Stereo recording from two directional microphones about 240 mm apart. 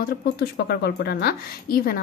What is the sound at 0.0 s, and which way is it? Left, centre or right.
Speech, left.